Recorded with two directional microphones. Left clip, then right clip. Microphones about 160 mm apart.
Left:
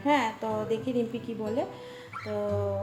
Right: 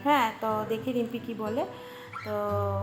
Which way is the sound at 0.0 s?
5° left (ahead or behind).